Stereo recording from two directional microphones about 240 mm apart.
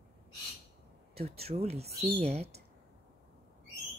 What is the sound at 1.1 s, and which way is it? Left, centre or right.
Speech, right.